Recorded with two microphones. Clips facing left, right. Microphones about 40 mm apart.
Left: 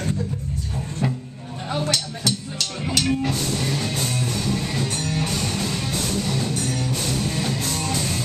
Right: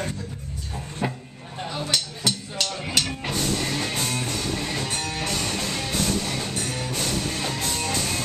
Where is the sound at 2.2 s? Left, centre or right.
Centre.